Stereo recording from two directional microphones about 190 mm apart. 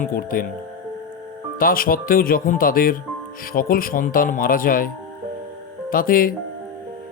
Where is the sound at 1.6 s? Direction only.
50° left (ahead or behind).